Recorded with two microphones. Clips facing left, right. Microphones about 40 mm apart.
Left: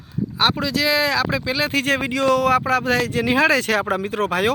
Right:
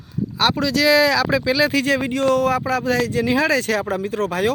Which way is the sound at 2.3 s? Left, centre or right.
Left.